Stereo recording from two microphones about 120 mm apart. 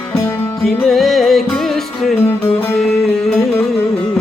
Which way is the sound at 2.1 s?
15° left (ahead or behind).